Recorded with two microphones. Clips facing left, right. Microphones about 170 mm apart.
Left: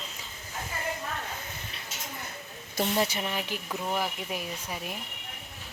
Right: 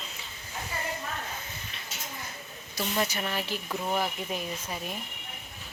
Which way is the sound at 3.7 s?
Centre (ahead or behind).